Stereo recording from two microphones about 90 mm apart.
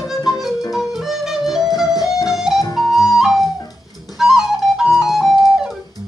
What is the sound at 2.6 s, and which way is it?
Flute, 45° left (ahead or behind).